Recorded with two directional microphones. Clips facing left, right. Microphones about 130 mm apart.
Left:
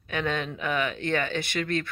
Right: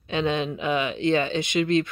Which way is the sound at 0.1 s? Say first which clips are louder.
Right 4 dB; 20° right (ahead or behind).